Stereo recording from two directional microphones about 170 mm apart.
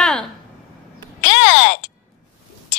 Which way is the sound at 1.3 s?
90° left.